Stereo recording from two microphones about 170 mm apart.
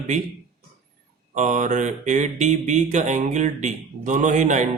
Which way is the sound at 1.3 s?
45° right (ahead or behind).